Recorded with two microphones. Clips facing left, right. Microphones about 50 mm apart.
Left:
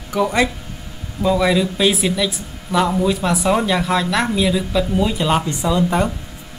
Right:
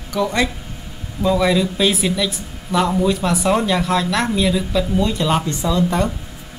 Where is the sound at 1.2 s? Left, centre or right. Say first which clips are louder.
Even; centre; by 6.1 s left.